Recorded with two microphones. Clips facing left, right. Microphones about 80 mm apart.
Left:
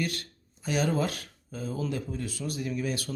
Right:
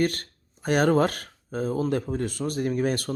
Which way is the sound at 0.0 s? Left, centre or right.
Right.